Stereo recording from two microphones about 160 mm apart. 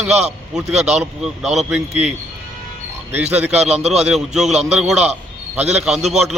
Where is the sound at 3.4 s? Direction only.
5° right (ahead or behind).